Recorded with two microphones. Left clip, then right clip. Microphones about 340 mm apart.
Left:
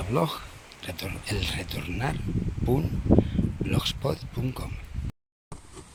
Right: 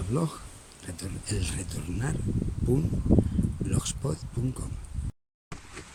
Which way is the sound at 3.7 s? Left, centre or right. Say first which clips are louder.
Left 9 dB; centre.